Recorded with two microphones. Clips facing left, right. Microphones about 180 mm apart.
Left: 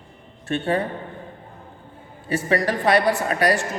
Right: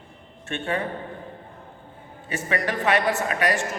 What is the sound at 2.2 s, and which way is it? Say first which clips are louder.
A woman's voice: left 5 dB; 35° left (ahead or behind).